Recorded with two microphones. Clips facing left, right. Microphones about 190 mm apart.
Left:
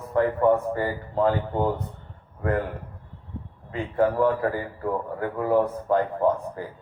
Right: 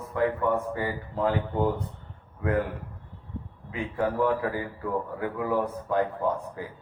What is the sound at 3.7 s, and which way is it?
A man's voice, 45° left (ahead or behind).